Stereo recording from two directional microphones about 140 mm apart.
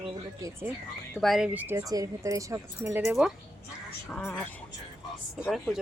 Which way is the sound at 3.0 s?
Centre (ahead or behind).